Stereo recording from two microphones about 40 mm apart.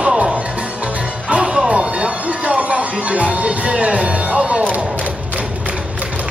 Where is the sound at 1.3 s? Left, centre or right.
Right.